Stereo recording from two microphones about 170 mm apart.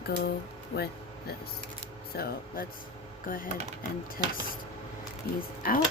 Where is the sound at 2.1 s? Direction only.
65° left (ahead or behind).